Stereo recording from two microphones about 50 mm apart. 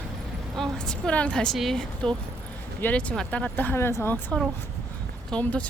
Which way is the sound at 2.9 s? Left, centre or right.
Left.